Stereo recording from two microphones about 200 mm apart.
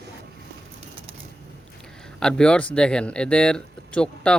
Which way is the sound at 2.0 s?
5° left (ahead or behind).